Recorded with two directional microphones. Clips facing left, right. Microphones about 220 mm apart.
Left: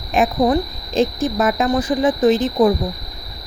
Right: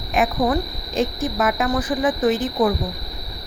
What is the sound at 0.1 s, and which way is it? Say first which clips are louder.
A woman's voice: left 4 dB; 30° left (ahead or behind).